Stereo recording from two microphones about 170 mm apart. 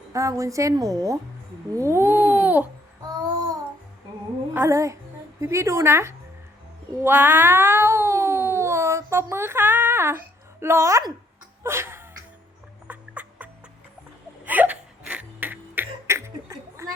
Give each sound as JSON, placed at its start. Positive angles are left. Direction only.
{"t": 0.1, "sound": "a woman's voice", "side_deg": -20}
{"t": 1.7, "sound": "babbling", "side_deg": -15}
{"t": 4.5, "sound": "speech", "side_deg": -15}
{"t": 6.9, "sound": "cat", "side_deg": -10}
{"t": 11.6, "sound": "a sound", "side_deg": -15}
{"t": 14.4, "sound": "hiccup", "side_deg": -10}